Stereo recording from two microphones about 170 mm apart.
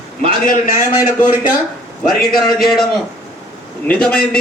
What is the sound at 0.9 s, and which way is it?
Speech, 15° right (ahead or behind).